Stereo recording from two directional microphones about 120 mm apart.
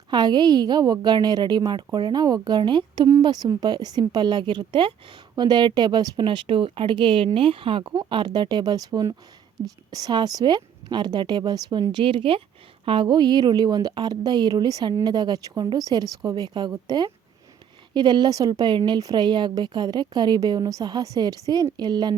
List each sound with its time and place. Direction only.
0.1 s speech: 35° right (ahead or behind)
6.2 s speech: 45° right (ahead or behind)